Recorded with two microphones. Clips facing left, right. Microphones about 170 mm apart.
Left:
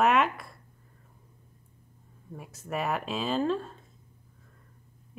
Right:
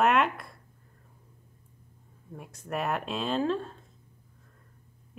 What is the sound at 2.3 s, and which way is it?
A woman's voice, centre (ahead or behind).